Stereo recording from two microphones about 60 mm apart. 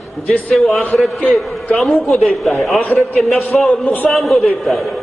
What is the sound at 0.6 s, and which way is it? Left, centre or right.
A man's voice, centre.